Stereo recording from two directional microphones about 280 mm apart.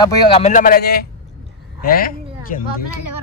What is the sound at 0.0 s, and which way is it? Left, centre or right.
A man's voice, centre.